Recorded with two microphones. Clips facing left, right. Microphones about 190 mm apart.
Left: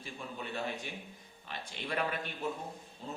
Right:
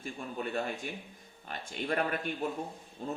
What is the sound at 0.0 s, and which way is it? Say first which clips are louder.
A man's voice: right 5 dB; 50° right (ahead or behind).